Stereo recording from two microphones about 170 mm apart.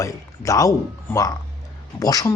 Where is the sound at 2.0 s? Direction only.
20° left (ahead or behind).